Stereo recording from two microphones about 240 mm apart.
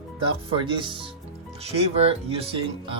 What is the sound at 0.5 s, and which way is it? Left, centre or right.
Speech, right.